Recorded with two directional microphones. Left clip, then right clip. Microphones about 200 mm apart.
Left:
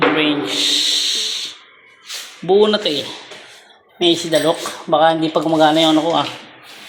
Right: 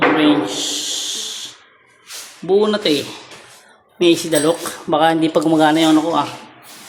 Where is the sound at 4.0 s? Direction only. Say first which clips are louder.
Even; 20° right (ahead or behind).